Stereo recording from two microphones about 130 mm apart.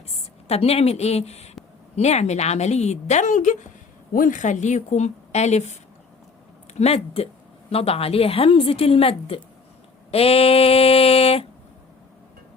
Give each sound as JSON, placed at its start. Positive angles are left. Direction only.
{"t": 0.4, "sound": "a woman's voice", "side_deg": 50}
{"t": 4.1, "sound": "speech", "side_deg": 85}
{"t": 6.7, "sound": "a woman's voice", "side_deg": 50}